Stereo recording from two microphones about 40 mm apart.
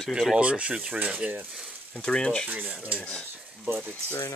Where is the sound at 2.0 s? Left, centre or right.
Left.